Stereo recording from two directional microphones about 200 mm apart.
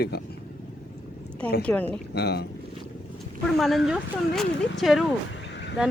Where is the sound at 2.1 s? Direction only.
55° left (ahead or behind).